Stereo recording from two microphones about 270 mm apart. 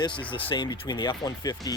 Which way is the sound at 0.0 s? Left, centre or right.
Centre.